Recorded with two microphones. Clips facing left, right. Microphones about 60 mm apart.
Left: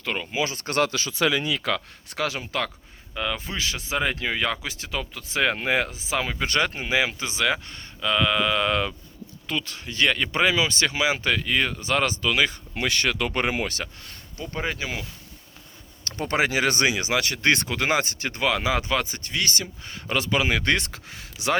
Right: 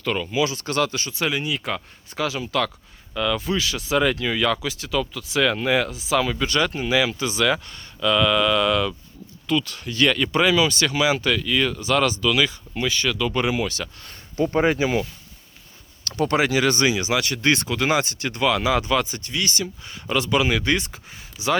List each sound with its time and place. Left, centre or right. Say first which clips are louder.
0.0 s speech: right 4 dB; centre
0.3 s speech: right 4 dB; left
2.1 s speech: right 2 dB; left
3.2 s speech: right 6 dB; left
12.7 s speech: right 1 dB; left
14.3 s speech: right 10 dB; right
14.8 s speech: right 10 dB; centre
16.0 s speech: right 3 dB; left
20.6 s speech: right 1 dB; left